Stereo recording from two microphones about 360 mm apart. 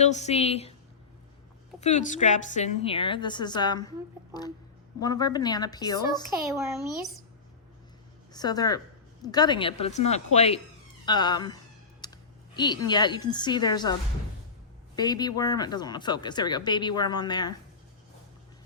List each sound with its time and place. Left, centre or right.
0.0 s speech: centre
1.8 s speech: centre
6.5 s speech: centre
8.3 s speech: centre
12.0 s a sound: centre
12.5 s speech: centre
14.9 s speech: centre